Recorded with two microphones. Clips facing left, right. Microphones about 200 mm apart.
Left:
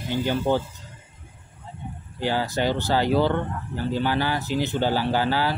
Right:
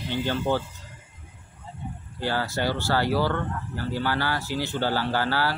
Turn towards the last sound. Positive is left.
turn(degrees=15)  # may be behind; listen again after turning